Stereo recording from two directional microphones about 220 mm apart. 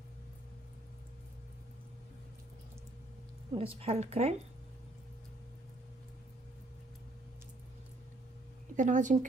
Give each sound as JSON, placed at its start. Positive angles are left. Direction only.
{"t": 3.5, "sound": "a woman's voice", "side_deg": -25}
{"t": 8.7, "sound": "a woman's voice", "side_deg": -35}